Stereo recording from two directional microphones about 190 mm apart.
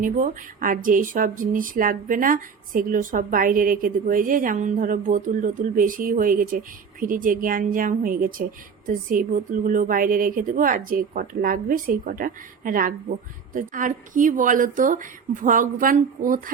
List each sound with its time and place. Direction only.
0.0 s speech: 45° right (ahead or behind)